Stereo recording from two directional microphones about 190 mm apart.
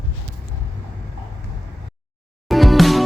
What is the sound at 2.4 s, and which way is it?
Music, centre (ahead or behind).